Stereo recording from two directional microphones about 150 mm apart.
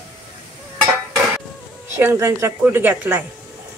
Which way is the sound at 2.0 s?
20° right (ahead or behind).